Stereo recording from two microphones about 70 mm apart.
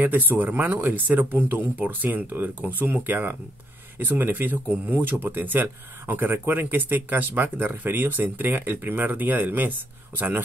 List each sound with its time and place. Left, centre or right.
0.0 s speech: right